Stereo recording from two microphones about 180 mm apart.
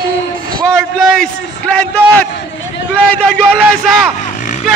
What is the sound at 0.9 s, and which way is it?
A man's voice, 5° left (ahead or behind).